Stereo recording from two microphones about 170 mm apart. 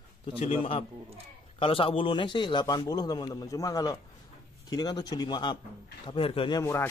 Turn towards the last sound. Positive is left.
turn(degrees=15)  # may be behind; listen again after turning